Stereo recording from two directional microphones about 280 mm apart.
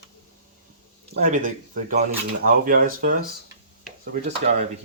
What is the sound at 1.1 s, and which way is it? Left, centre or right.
Speech, right.